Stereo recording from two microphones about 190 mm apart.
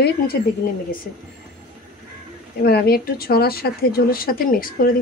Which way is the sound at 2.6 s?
55° left (ahead or behind).